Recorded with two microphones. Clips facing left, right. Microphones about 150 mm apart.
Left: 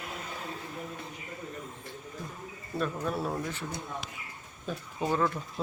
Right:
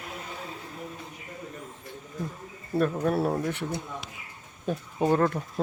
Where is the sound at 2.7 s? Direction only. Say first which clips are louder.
Right 7 dB; 55° right (ahead or behind).